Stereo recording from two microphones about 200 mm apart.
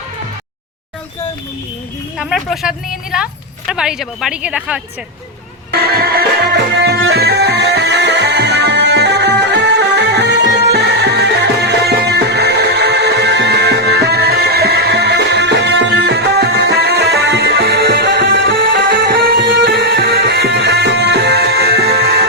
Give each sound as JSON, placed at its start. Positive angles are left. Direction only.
{"t": 2.1, "sound": "speech", "side_deg": 0}
{"t": 5.7, "sound": "music", "side_deg": -50}